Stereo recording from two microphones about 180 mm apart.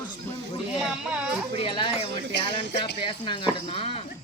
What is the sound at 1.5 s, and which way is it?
Speech, 30° left (ahead or behind).